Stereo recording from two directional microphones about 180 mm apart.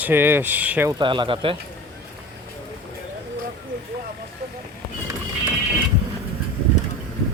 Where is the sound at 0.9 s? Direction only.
25° right (ahead or behind).